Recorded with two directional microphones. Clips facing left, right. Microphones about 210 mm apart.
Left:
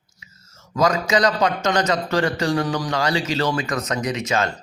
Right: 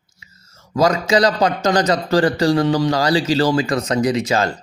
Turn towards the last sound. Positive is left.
turn(degrees=-35)  # may be behind; listen again after turning